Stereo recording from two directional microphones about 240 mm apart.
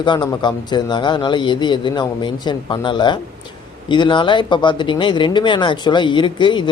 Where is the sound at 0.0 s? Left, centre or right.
Centre.